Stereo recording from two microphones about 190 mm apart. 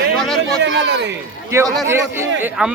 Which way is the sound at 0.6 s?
70° right (ahead or behind).